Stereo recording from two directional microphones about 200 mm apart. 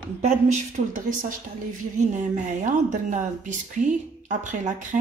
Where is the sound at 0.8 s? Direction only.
40° right (ahead or behind).